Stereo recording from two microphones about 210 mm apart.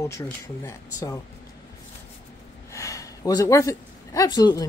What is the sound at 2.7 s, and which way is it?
Speech, 15° left (ahead or behind).